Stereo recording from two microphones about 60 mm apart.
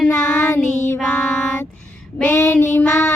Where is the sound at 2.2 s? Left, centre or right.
Left.